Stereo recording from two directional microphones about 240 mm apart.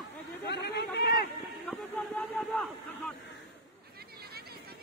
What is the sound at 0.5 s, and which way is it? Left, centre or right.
Chatter, left.